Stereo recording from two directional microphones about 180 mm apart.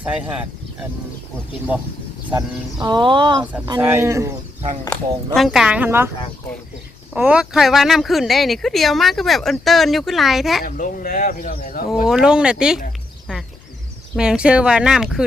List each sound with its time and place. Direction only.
0.0 s speech: 10° right (ahead or behind)
2.8 s speech: 25° right (ahead or behind)
3.8 s speech: 10° right (ahead or behind)
5.3 s speech: centre (ahead or behind)
7.1 s speech: 5° right (ahead or behind)
10.6 s speech: 50° left (ahead or behind)
12.0 s speech: 5° right (ahead or behind)
14.2 s speech: 5° right (ahead or behind)